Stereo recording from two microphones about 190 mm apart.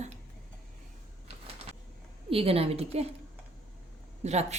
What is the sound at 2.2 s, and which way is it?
Speech, 30° right (ahead or behind).